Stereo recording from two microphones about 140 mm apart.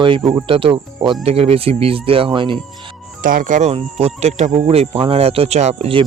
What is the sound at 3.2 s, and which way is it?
Speech, 80° right.